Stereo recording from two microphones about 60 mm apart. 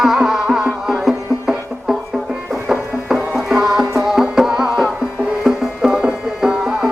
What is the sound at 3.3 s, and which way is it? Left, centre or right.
Music, centre.